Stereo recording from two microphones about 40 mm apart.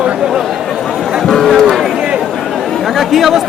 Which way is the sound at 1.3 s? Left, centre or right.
Centre.